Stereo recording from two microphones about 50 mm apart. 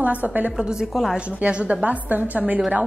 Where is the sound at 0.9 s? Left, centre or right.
Centre.